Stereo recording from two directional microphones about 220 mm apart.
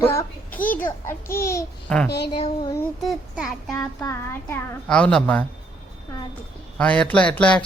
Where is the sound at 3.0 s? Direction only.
Centre (ahead or behind).